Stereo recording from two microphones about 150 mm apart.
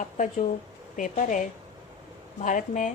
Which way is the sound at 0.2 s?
55° left (ahead or behind).